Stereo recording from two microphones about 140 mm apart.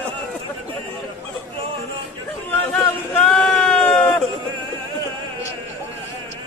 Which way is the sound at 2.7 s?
10° left (ahead or behind).